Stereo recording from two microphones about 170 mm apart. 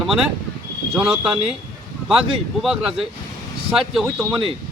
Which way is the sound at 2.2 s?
35° right (ahead or behind).